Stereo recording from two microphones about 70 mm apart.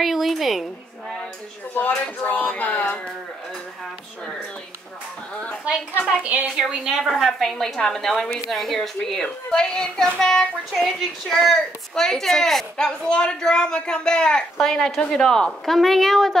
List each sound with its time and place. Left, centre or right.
0.0 s a woman's voice: centre
2.2 s a sound: left
5.9 s speech: centre
6.2 s a woman's voice: right
6.6 s a woman's voice: centre